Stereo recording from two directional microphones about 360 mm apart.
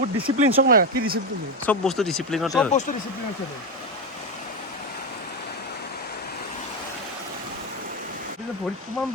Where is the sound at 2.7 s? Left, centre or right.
Centre.